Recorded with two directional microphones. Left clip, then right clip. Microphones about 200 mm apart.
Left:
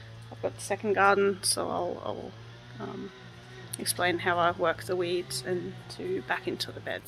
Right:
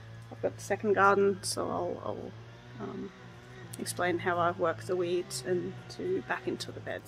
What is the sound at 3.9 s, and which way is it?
Speech, 5° right (ahead or behind).